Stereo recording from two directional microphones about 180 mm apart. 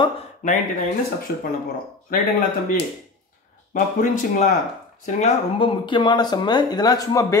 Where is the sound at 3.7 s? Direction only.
45° left (ahead or behind).